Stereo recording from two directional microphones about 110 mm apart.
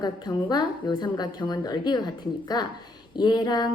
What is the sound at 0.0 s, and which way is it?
Speech, 40° left (ahead or behind).